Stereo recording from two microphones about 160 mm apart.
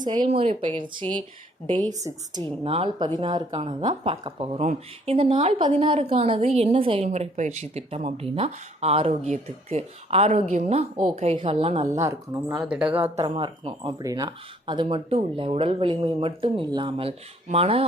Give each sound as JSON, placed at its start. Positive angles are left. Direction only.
{"t": 0.0, "sound": "speech", "side_deg": -25}
{"t": 0.3, "sound": "speech", "side_deg": -40}
{"t": 2.6, "sound": "speech", "side_deg": -35}
{"t": 11.7, "sound": "a woman's voice", "side_deg": -50}
{"t": 11.9, "sound": "speech", "side_deg": -20}
{"t": 12.6, "sound": "speech", "side_deg": -5}
{"t": 13.0, "sound": "speech", "side_deg": -35}